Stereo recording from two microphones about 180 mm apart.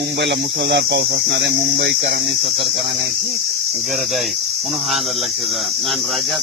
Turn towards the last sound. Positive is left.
turn(degrees=0)  # may be behind; listen again after turning